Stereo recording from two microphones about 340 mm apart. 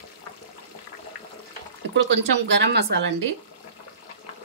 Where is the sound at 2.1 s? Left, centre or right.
Right.